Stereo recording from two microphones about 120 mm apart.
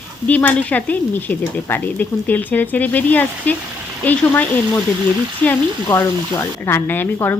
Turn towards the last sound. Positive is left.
turn(degrees=15)  # may be behind; listen again after turning